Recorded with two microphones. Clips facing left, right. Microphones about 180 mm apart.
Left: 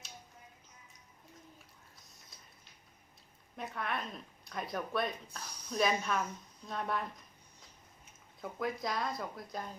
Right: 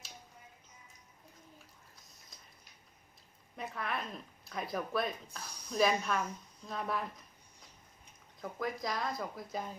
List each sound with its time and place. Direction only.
2.0 s a sound: centre (ahead or behind)
3.5 s speech: centre (ahead or behind)
8.4 s speech: centre (ahead or behind)